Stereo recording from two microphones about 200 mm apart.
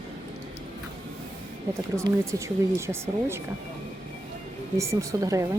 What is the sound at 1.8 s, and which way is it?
Speech, 15° right (ahead or behind).